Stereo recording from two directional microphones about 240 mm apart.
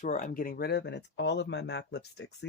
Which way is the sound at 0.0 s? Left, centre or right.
Left.